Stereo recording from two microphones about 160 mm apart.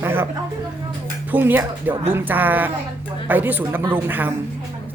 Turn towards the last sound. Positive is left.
turn(degrees=-10)  # may be behind; listen again after turning